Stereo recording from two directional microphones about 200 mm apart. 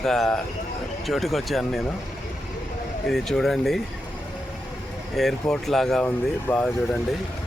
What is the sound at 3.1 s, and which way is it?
Speech, centre (ahead or behind).